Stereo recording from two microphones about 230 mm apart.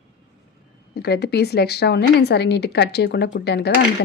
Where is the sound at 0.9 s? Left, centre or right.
Left.